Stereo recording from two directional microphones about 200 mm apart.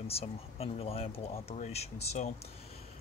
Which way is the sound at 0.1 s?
30° left (ahead or behind).